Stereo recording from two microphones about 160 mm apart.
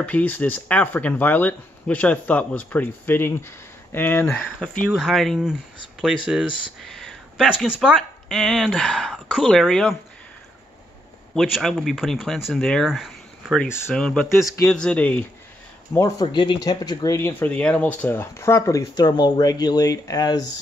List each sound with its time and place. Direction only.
0.0 s speech: 10° left (ahead or behind)
11.3 s speech: centre (ahead or behind); by 16.3 s 15° left (ahead or behind)
16.3 s speech: 30° left (ahead or behind)